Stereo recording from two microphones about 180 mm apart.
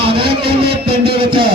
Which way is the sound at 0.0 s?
30° right (ahead or behind).